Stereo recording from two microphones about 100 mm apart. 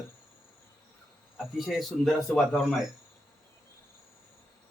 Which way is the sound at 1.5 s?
Centre (ahead or behind).